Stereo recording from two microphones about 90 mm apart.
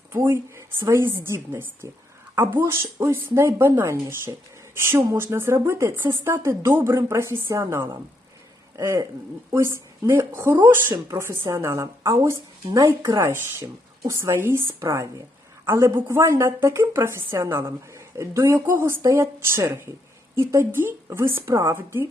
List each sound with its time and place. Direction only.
0.1 s a woman's voice: 25° right (ahead or behind)
10.9 s a woman's voice: 35° right (ahead or behind)
15.6 s a woman's voice: 30° right (ahead or behind)